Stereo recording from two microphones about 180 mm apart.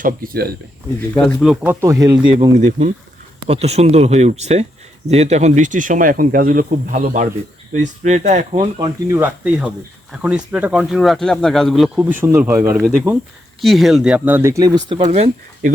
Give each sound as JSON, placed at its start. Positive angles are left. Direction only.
{"t": 0.0, "sound": "speech", "side_deg": -55}
{"t": 1.1, "sound": "speech", "side_deg": 20}
{"t": 1.4, "sound": "speech", "side_deg": -5}
{"t": 2.5, "sound": "speech", "side_deg": -40}
{"t": 9.0, "sound": "speech", "side_deg": -10}
{"t": 12.8, "sound": "speech", "side_deg": -5}
{"t": 15.0, "sound": "speech", "side_deg": -40}